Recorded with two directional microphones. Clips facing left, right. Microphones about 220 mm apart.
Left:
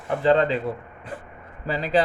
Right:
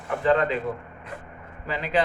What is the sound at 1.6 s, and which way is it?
Speech, 35° left (ahead or behind).